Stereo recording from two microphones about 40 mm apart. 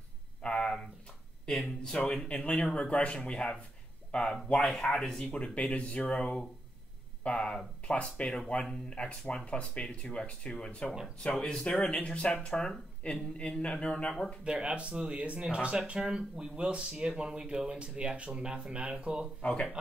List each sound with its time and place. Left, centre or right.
0.4 s a sound: left
1.8 s speech: left
5.3 s speech: left
14.4 s speech: right
19.4 s speech: left